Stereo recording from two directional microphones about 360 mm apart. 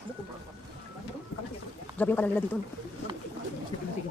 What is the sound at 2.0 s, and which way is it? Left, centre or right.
Speech, centre.